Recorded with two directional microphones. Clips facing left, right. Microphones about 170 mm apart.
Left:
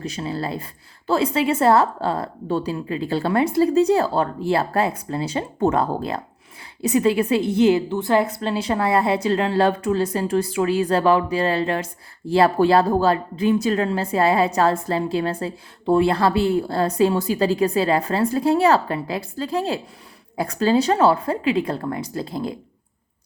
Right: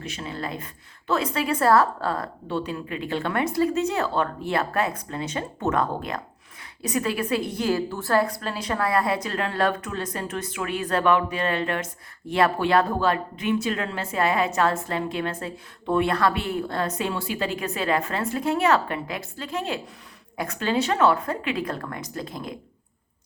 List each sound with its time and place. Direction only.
0.0 s a woman's voice: 35° left (ahead or behind)
2.5 s a woman's voice: 40° left (ahead or behind)